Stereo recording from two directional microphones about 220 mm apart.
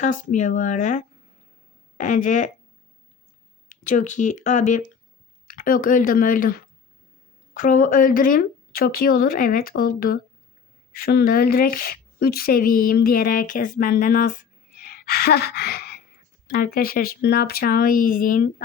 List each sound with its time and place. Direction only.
0.0 s a woman's voice: 35° left (ahead or behind)
3.7 s a woman's voice: 35° left (ahead or behind)
14.8 s gasp: 40° left (ahead or behind)
16.5 s a woman's voice: 40° left (ahead or behind)